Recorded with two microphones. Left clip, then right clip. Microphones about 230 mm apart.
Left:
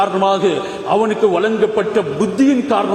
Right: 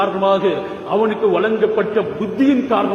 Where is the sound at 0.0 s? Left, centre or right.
Left.